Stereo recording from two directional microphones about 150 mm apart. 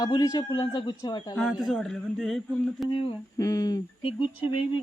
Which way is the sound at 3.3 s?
25° left (ahead or behind).